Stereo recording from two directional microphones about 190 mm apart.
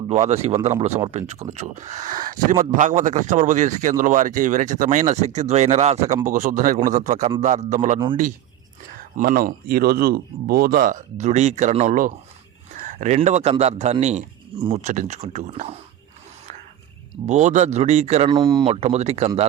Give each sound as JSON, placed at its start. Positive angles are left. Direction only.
{"t": 0.1, "sound": "speech", "side_deg": -35}
{"t": 9.0, "sound": "speech", "side_deg": -50}
{"t": 17.2, "sound": "speech", "side_deg": -40}
{"t": 18.3, "sound": "speech", "side_deg": -20}
{"t": 18.7, "sound": "speech", "side_deg": -35}